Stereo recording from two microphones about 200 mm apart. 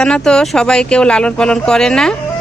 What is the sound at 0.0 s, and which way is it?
Speech, 5° left (ahead or behind).